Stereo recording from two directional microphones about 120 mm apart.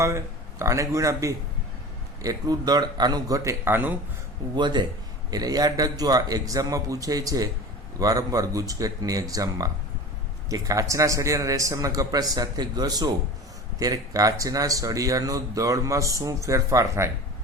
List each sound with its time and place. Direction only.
0.6 s speech: 25° right (ahead or behind)
4.5 s a man's voice: 40° right (ahead or behind)